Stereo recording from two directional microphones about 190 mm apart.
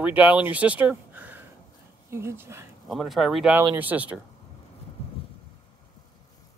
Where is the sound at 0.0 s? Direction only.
5° right (ahead or behind).